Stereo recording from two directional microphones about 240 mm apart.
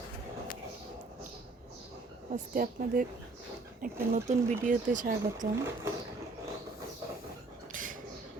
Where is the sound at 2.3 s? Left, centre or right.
Right.